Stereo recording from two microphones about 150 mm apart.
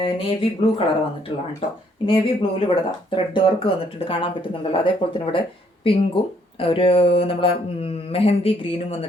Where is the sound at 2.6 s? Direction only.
35° left (ahead or behind).